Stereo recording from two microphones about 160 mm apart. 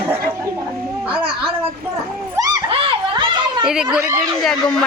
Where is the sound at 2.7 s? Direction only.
30° right (ahead or behind).